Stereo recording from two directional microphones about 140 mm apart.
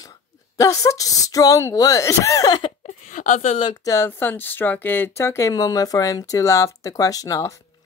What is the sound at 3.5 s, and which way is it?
Speech, 35° left (ahead or behind).